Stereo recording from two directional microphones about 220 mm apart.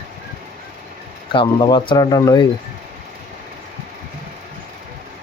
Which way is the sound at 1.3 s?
20° left (ahead or behind).